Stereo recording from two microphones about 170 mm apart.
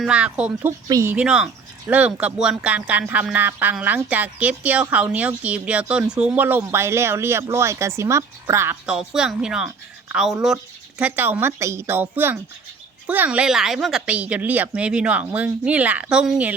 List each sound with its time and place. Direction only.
0.0 s speech: 5° right (ahead or behind)
0.9 s speech: 20° right (ahead or behind)
1.1 s speech: 5° right (ahead or behind)
8.9 s speech: 5° right (ahead or behind)